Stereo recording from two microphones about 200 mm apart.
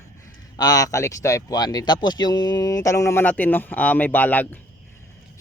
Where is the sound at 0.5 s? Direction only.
20° left (ahead or behind).